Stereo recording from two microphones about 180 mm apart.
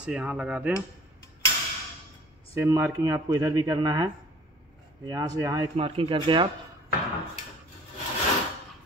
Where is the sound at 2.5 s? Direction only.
15° right (ahead or behind).